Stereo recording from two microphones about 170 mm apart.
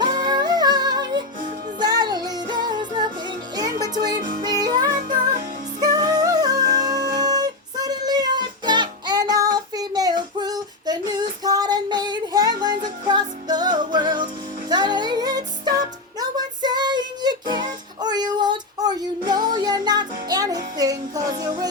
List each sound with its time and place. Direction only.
0.0 s music: 25° right (ahead or behind)
5.0 s music: 55° right (ahead or behind)
5.8 s music: 25° right (ahead or behind)